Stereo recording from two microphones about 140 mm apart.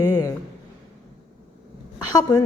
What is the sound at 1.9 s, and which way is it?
Speech, 30° left (ahead or behind).